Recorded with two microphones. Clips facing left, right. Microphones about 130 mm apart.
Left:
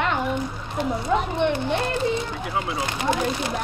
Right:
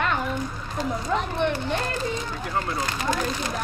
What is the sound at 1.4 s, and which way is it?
Speech, 20° left (ahead or behind).